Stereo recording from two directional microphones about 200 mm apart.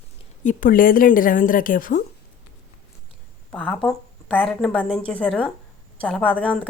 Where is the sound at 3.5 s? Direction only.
5° left (ahead or behind).